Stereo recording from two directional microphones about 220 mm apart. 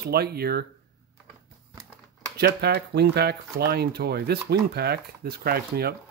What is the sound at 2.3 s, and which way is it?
A man's voice, 45° right (ahead or behind).